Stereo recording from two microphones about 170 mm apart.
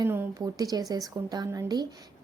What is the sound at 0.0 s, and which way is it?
A woman's voice, 15° right (ahead or behind).